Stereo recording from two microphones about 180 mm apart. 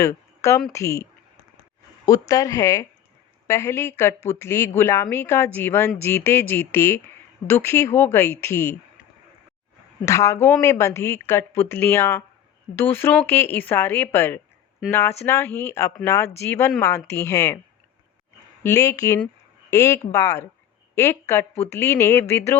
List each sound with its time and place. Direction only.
0.0 s speech: 15° left (ahead or behind)
2.0 s speech: 20° left (ahead or behind)
10.1 s speech: 15° left (ahead or behind)
18.6 s speech: 15° left (ahead or behind)